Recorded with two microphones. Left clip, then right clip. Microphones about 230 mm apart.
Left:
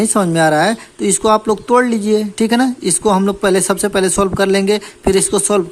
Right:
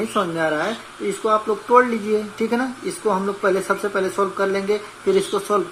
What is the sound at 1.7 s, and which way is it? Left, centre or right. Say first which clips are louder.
Speech: left 2 dB; left.